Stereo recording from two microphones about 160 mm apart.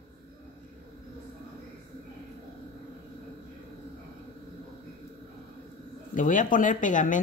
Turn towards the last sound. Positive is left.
turn(degrees=55)  # may be behind; listen again after turning